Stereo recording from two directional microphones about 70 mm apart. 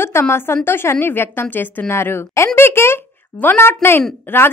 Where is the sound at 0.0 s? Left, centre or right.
Left.